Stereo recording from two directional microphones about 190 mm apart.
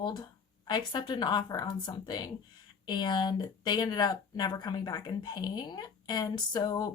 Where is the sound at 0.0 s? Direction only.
20° left (ahead or behind).